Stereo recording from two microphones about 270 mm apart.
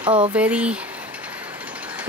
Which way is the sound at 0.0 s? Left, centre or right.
Centre.